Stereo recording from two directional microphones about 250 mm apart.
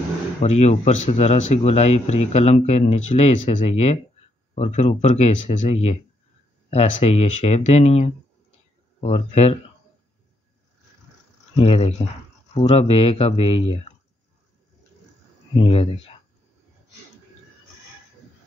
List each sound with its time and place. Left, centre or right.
0.4 s speech: left
11.5 s speech: left
15.5 s speech: left